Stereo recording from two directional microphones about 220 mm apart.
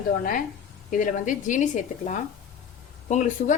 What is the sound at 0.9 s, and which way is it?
A woman's voice, 35° left (ahead or behind).